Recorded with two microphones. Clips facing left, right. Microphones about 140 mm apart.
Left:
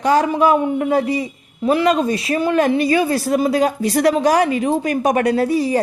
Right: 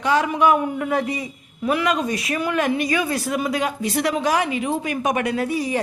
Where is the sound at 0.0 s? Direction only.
40° left (ahead or behind).